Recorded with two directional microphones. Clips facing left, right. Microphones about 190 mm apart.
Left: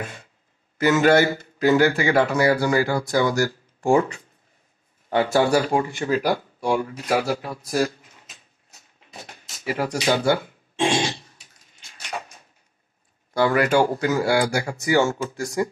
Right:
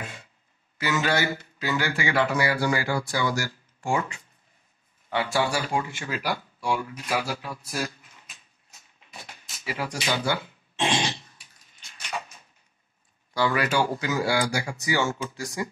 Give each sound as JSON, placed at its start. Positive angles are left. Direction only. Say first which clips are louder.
{"t": 0.7, "sound": "speech", "louder": "left 9 dB", "side_deg": 50}
{"t": 9.2, "sound": "drawer open or close", "louder": "left 6 dB", "side_deg": 50}
{"t": 10.0, "sound": "speech", "louder": "left 7 dB", "side_deg": 45}
{"t": 13.3, "sound": "speech", "louder": "left 6 dB", "side_deg": 50}